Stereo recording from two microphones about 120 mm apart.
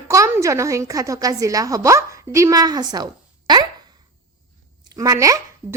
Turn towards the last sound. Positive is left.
turn(degrees=-25)  # may be behind; listen again after turning